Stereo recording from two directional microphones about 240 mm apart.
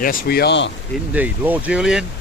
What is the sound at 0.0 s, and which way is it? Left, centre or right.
Speech, left.